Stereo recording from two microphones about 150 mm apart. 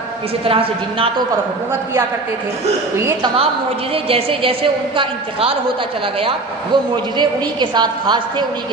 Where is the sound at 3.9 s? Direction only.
40° right (ahead or behind).